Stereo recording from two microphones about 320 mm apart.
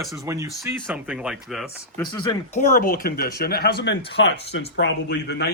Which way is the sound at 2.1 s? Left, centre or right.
Centre.